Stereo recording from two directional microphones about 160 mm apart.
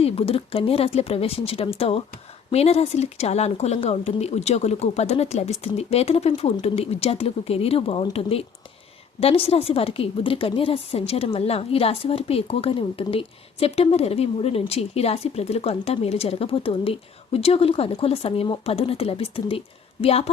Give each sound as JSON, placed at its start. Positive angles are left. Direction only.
{"t": 0.0, "sound": "a woman's voice", "side_deg": 35}